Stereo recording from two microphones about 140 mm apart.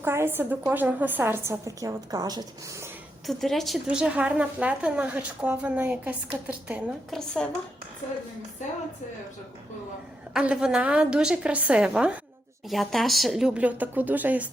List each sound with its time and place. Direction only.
0.0 s a woman's voice: 15° right (ahead or behind)
3.2 s a woman's voice: centre (ahead or behind)
7.1 s speech: 5° left (ahead or behind)
10.3 s a woman's voice: 5° right (ahead or behind)